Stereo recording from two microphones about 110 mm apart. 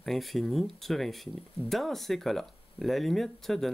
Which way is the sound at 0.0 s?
Centre (ahead or behind).